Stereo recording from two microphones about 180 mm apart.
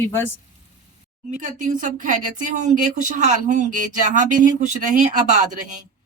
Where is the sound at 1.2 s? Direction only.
45° right (ahead or behind).